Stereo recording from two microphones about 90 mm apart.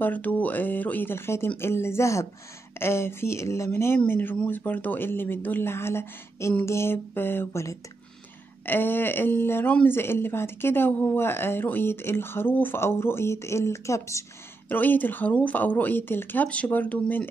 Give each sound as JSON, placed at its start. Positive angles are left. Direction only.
{"t": 0.0, "sound": "speech", "side_deg": 20}
{"t": 14.7, "sound": "speech", "side_deg": 20}